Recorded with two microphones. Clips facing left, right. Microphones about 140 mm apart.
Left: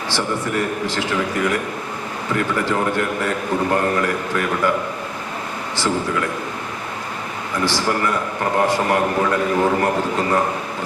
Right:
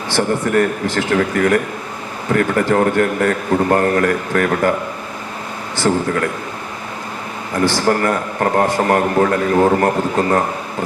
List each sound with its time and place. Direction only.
0.1 s a man's voice: 50° right (ahead or behind)
5.7 s a man's voice: 50° right (ahead or behind)
7.6 s a man's voice: 50° right (ahead or behind)